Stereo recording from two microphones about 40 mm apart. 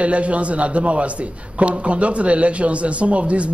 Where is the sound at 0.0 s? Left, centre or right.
Right.